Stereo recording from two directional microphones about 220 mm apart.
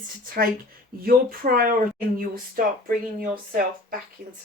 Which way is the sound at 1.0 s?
40° right (ahead or behind).